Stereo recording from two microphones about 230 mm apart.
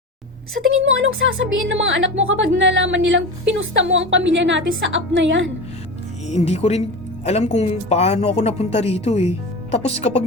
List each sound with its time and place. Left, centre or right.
0.7 s speech: right
6.2 s speech: left